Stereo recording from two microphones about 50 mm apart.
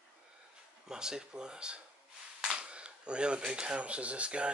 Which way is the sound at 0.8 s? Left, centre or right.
Centre.